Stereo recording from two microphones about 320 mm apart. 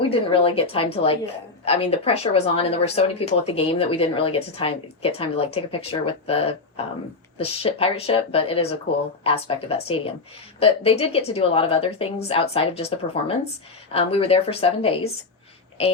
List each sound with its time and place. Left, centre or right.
0.0 s a woman's voice: centre